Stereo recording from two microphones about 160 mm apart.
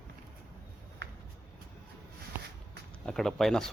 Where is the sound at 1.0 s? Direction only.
90° right.